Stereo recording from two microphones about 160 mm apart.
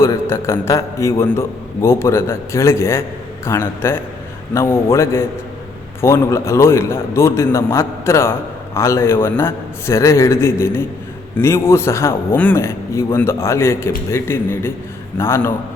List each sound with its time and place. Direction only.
0.0 s a man's voice: 15° left (ahead or behind)